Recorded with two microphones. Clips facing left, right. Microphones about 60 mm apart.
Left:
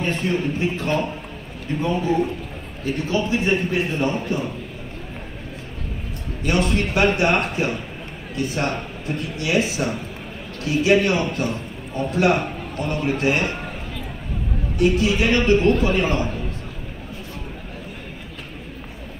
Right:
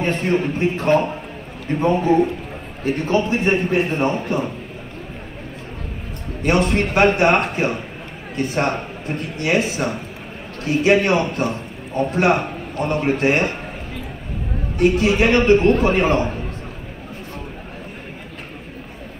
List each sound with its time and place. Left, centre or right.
0.0 s a man's voice: right
2.8 s a man's voice: right
6.4 s a man's voice: right
14.8 s a man's voice: right